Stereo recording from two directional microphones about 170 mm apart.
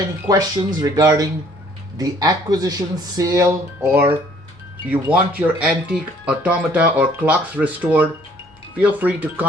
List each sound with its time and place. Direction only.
0.3 s speech: 20° right (ahead or behind)